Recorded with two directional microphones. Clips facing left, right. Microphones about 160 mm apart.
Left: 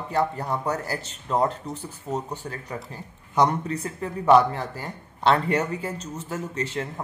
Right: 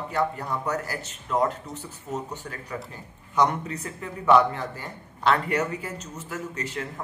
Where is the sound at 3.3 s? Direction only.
35° left (ahead or behind).